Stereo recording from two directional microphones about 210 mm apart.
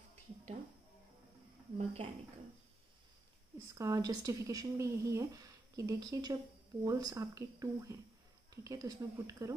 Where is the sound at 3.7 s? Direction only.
15° right (ahead or behind).